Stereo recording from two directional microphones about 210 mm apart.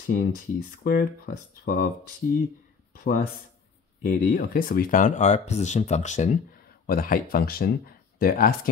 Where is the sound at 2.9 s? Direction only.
45° left (ahead or behind).